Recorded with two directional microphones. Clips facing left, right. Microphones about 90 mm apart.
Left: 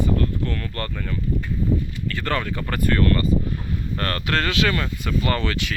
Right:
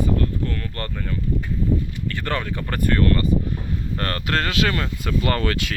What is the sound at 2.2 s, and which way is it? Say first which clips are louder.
Speech: left 1 dB; 20° right (ahead or behind).